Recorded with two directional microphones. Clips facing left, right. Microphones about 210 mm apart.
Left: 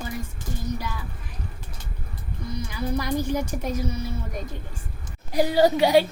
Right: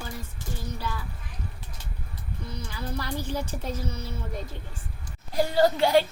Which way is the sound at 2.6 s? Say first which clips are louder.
Left 7 dB; 15° left (ahead or behind).